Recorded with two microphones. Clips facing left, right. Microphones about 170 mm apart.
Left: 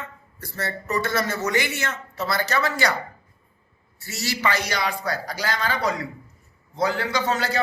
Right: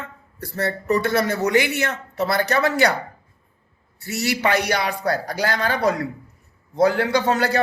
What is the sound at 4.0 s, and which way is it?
A man's voice, 60° right (ahead or behind).